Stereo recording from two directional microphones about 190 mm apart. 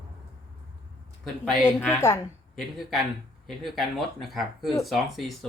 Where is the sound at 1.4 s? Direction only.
Centre (ahead or behind).